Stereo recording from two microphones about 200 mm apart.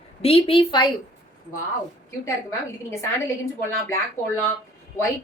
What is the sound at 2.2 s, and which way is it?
Speech, 15° left (ahead or behind).